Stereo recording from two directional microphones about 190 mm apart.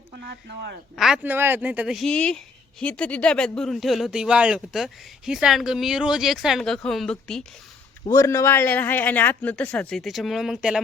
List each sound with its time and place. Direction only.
0.3 s speech: 60° right (ahead or behind)
0.9 s speech: 5° right (ahead or behind)
8.1 s a man's voice: 15° left (ahead or behind); by 10.8 s 5° right (ahead or behind)